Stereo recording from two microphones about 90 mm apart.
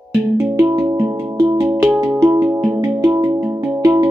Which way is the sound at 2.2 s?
25° right (ahead or behind).